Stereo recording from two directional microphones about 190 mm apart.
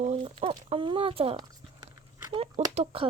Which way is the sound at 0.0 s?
30° right (ahead or behind).